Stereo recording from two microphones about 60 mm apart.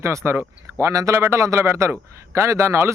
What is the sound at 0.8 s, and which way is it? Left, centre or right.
Speech, right.